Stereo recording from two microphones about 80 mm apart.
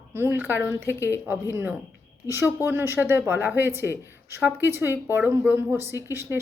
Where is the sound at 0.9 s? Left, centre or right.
Left.